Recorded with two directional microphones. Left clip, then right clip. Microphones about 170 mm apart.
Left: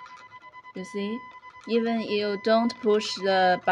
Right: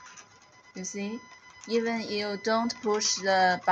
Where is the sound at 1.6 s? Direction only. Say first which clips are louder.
Left 3 dB; 40° left (ahead or behind).